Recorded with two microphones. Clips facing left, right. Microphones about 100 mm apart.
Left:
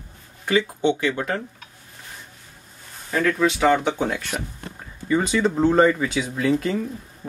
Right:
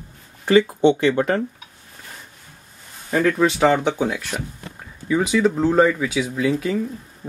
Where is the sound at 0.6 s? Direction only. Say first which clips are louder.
Right 5 dB; 30° right (ahead or behind).